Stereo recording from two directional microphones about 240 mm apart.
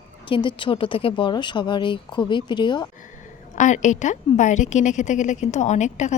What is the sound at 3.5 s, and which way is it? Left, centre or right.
A woman's voice, left.